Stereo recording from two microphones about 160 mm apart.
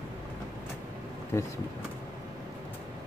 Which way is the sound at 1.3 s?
15° left (ahead or behind).